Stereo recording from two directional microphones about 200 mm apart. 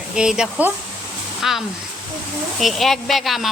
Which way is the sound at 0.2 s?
5° right (ahead or behind).